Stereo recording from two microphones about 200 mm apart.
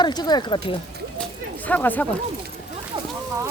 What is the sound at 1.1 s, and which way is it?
Speech, 5° left (ahead or behind).